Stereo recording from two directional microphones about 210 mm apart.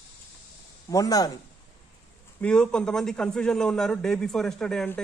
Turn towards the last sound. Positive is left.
turn(degrees=5)  # may be behind; listen again after turning